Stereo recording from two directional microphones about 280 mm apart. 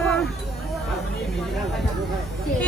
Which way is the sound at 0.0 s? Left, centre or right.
Centre.